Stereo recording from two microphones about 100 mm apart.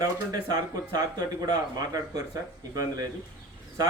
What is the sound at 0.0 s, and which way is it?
Speech, 40° right (ahead or behind).